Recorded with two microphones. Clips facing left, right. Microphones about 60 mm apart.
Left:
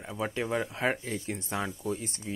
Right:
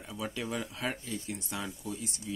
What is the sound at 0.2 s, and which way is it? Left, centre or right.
Speech, left.